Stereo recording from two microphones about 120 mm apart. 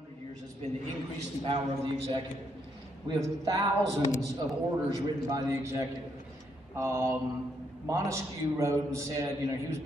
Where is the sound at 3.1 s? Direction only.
40° right (ahead or behind).